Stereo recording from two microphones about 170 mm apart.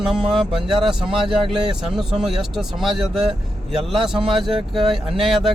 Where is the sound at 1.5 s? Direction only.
5° right (ahead or behind).